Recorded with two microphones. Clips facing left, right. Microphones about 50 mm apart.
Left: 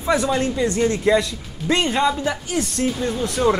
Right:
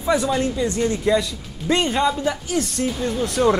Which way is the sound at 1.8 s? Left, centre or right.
Centre.